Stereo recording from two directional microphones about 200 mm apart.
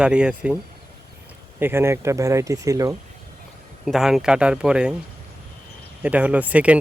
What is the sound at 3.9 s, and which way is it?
Speech, centre (ahead or behind).